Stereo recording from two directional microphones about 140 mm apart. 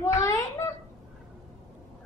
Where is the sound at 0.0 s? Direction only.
20° left (ahead or behind).